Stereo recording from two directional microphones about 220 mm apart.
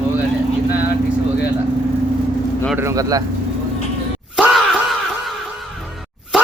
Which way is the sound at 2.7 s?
15° right (ahead or behind).